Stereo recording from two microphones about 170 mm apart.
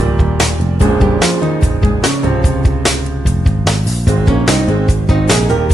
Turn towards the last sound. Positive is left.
turn(degrees=0)  # may be behind; listen again after turning